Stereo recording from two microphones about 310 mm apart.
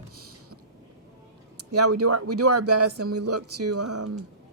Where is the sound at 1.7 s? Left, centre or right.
Right.